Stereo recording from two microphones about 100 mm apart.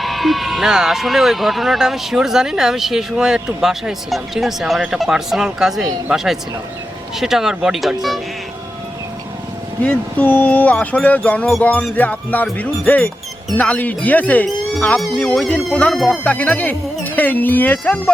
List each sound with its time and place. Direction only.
0.0 s speech: centre (ahead or behind)
9.8 s speech: 15° left (ahead or behind)
14.4 s music: 10° left (ahead or behind)
15.0 s speech: 5° left (ahead or behind)
16.2 s speech: 15° left (ahead or behind)